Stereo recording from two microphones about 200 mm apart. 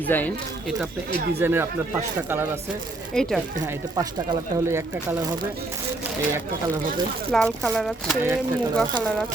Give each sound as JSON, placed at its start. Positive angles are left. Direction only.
{"t": 0.1, "sound": "speech", "side_deg": 10}
{"t": 1.4, "sound": "speech", "side_deg": -10}
{"t": 3.2, "sound": "speech", "side_deg": 5}
{"t": 3.9, "sound": "speech", "side_deg": -15}
{"t": 7.3, "sound": "speech", "side_deg": 5}